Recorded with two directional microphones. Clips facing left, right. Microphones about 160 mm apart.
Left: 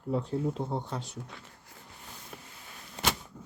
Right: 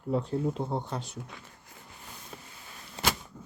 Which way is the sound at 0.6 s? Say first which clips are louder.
Right 1 dB; 45° right (ahead or behind).